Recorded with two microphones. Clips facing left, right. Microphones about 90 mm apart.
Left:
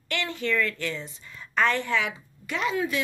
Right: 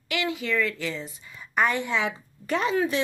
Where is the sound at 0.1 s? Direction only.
5° right (ahead or behind).